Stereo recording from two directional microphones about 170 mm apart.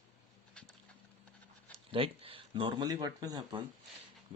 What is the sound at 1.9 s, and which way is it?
Speech, 30° right (ahead or behind).